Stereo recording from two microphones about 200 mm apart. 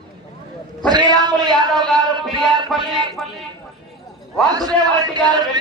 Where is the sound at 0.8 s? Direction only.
20° right (ahead or behind).